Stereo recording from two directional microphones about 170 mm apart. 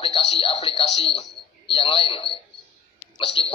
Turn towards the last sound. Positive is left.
turn(degrees=30)  # may be behind; listen again after turning